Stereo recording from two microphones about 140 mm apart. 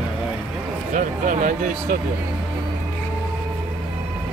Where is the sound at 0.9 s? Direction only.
65° right (ahead or behind).